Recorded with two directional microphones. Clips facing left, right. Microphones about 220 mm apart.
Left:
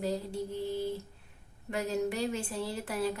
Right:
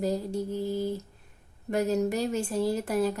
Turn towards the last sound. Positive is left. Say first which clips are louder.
# right 7 dB
turn(degrees=-45)  # may be behind; listen again after turning